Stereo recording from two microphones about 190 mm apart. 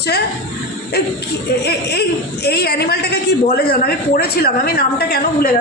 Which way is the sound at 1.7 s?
60° left (ahead or behind).